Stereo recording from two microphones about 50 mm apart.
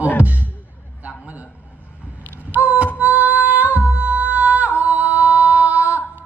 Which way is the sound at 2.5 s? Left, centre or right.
Right.